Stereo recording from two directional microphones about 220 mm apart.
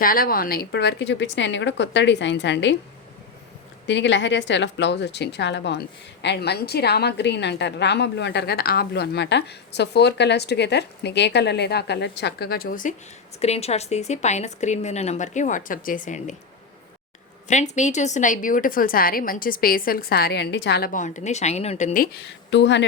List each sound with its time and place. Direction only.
0.0 s a woman's voice: 40° left (ahead or behind)
3.8 s a woman's voice: 55° left (ahead or behind)
13.4 s a woman's voice: 30° left (ahead or behind)
17.5 s a woman's voice: 35° left (ahead or behind)
22.4 s a woman's voice: 55° left (ahead or behind)